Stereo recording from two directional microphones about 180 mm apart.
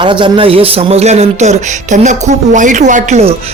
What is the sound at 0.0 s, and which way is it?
A man's voice, 25° right (ahead or behind).